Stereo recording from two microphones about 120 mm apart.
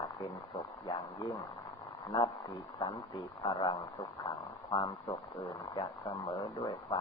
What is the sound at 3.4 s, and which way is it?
A man's voice, 40° left (ahead or behind).